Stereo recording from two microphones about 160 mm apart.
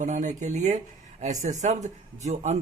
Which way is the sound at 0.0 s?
50° right (ahead or behind).